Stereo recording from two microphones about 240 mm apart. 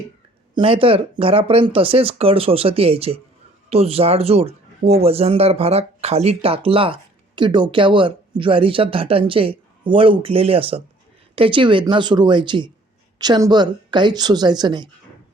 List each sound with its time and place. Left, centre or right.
0.5 s a woman's voice: right